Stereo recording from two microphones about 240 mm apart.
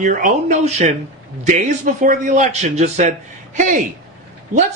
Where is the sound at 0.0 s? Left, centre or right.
Right.